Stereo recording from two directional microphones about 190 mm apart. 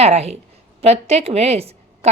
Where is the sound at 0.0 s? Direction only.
35° right (ahead or behind).